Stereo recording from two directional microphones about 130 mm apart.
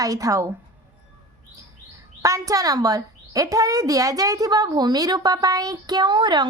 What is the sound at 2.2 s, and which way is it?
A child's voice, 25° right (ahead or behind).